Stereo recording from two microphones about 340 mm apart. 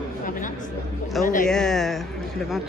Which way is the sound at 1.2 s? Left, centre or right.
Centre.